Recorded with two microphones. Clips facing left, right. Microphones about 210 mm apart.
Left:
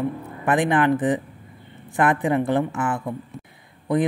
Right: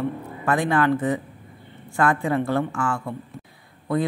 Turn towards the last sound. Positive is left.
turn(degrees=15)  # may be behind; listen again after turning